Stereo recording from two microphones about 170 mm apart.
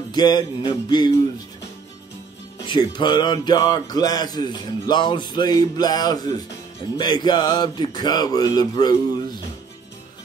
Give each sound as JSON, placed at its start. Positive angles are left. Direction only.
{"t": 0.1, "sound": "speech", "side_deg": 25}
{"t": 2.6, "sound": "speech", "side_deg": 25}